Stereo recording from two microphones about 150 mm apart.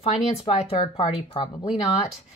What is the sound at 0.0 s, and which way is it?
Speech, 40° left (ahead or behind).